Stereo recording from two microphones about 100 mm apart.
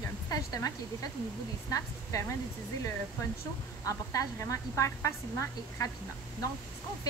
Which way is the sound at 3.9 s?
30° left (ahead or behind).